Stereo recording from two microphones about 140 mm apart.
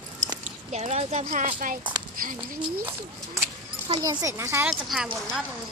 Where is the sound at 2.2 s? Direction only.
90° right.